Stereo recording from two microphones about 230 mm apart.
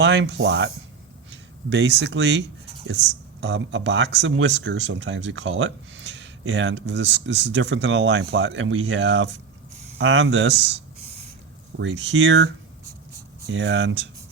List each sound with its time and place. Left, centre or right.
0.0 s speech: right
11.8 s speech: right
13.5 s speech: right